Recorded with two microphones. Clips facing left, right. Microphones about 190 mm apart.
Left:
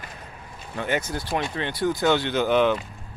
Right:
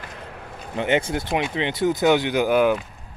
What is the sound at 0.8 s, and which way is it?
Speech, 25° right (ahead or behind).